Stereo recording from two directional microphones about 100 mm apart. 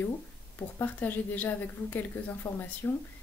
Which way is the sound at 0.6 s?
20° left (ahead or behind).